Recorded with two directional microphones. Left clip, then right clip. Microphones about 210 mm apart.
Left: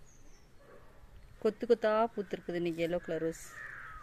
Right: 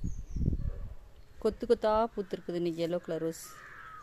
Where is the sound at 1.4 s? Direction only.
20° right (ahead or behind).